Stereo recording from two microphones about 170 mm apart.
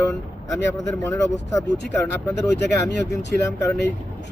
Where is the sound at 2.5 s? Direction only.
90° left.